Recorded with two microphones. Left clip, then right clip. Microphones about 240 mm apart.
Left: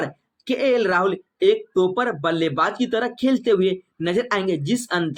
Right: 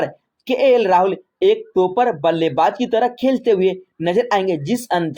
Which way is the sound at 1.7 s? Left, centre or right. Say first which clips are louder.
Right 4 dB; right.